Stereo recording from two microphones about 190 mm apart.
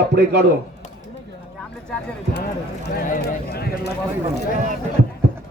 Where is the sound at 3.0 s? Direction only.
50° left (ahead or behind).